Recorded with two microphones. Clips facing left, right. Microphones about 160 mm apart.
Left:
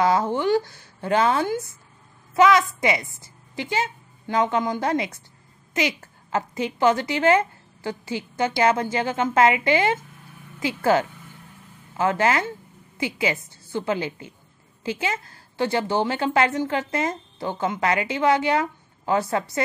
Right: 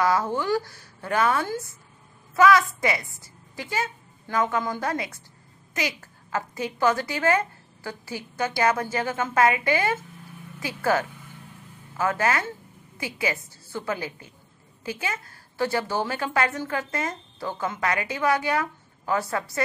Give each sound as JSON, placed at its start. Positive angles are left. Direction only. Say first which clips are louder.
{"t": 0.0, "sound": "a woman's voice", "louder": "left 3 dB", "side_deg": 20}